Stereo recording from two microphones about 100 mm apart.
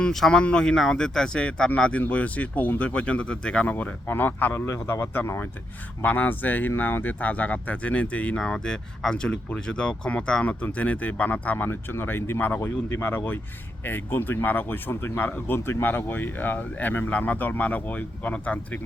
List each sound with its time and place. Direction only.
0.0 s speech: 5° left (ahead or behind)